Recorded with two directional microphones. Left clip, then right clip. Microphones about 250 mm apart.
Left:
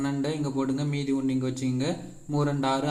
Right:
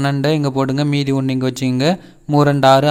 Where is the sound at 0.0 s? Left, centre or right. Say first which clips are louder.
Right 12 dB; right.